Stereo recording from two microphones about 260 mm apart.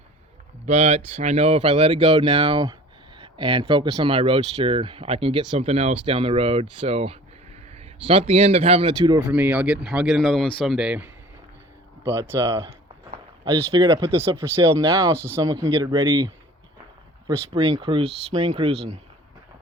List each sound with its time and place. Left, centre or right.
0.6 s speech: right
9.1 s speech: centre
13.4 s speech: right
17.2 s speech: centre